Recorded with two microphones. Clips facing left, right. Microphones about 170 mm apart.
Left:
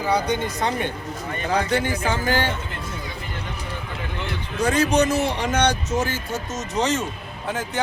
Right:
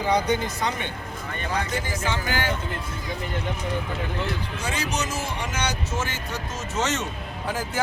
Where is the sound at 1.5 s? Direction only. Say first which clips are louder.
Left 6 dB; 65° left (ahead or behind).